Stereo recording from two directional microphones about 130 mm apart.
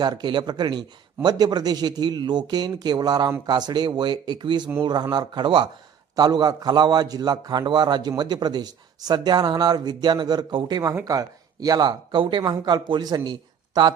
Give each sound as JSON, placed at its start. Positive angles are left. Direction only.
{"t": 0.0, "sound": "a man's voice", "side_deg": -35}